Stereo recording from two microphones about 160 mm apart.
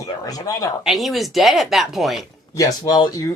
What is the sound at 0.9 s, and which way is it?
Speech, centre (ahead or behind).